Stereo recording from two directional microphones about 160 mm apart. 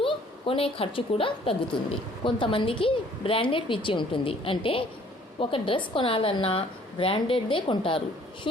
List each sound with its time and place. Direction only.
0.0 s a woman's voice: 35° left (ahead or behind)